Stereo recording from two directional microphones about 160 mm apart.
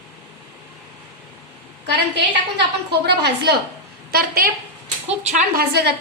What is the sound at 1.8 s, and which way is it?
A woman's voice, 90° right.